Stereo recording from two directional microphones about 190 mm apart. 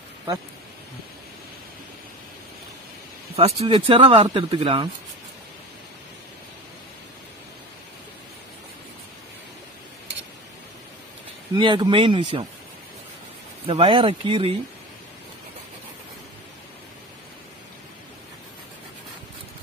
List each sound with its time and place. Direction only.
3.3 s speech: 30° right (ahead or behind)
11.5 s speech: 25° right (ahead or behind)
13.7 s speech: 30° right (ahead or behind)